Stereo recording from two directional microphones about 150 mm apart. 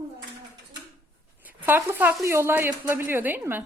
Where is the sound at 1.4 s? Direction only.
15° right (ahead or behind).